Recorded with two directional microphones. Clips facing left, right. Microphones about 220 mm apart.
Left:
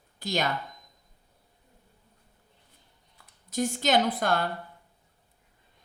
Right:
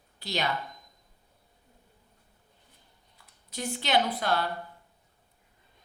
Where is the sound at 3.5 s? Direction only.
45° left (ahead or behind).